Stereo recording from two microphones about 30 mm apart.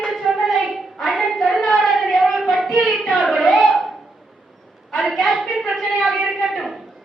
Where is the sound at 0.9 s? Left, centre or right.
Centre.